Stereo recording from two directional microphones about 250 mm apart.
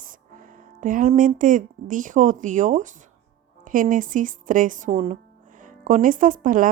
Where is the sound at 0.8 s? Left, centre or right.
Right.